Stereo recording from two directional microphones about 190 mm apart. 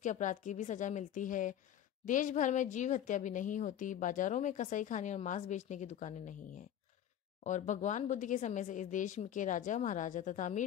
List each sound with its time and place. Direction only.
0.0 s a woman's voice: 40° left (ahead or behind)